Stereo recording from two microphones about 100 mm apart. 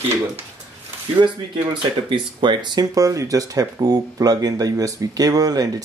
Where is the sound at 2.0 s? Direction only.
55° right (ahead or behind).